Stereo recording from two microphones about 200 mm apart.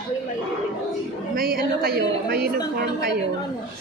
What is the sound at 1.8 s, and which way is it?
Speech, 50° right (ahead or behind).